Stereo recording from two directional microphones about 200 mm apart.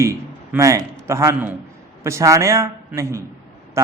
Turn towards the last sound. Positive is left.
turn(degrees=-15)  # may be behind; listen again after turning